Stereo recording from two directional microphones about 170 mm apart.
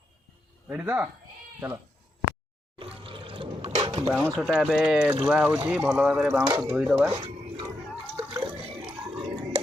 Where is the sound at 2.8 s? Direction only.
35° right (ahead or behind).